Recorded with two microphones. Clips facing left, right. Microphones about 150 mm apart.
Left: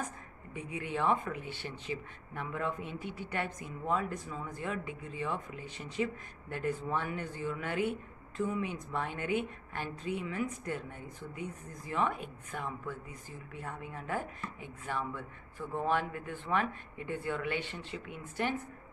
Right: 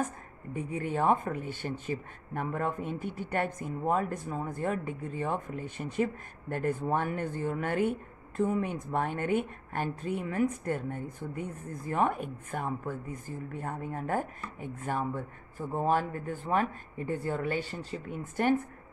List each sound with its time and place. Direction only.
0.0 s speech: 45° right (ahead or behind)